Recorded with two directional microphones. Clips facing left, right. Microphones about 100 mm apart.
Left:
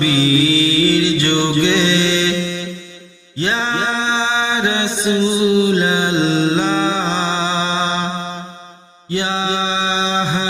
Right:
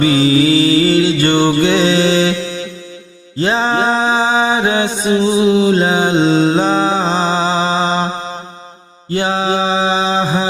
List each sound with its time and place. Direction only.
0.0 s music: 40° right (ahead or behind)
9.0 s mantra: 40° right (ahead or behind)